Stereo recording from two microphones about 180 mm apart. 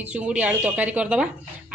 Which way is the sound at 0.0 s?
10° right (ahead or behind).